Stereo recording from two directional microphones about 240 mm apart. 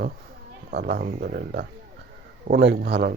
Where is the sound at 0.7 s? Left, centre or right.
Right.